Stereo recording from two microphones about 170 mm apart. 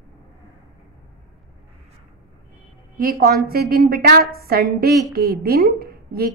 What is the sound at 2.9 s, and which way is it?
A woman's voice, 60° right (ahead or behind).